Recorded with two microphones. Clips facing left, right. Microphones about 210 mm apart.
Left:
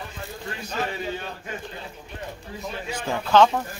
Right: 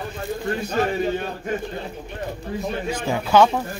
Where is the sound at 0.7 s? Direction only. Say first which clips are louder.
Right 6 dB; 50° right (ahead or behind).